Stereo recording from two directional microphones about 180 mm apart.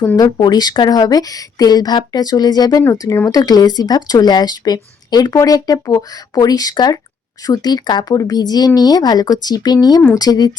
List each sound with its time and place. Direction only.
0.2 s a woman's voice: 20° left (ahead or behind)